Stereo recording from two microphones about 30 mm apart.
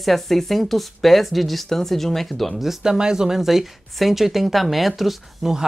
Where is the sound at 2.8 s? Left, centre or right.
Right.